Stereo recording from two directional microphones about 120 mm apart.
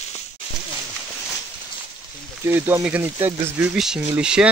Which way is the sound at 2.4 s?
20° right (ahead or behind).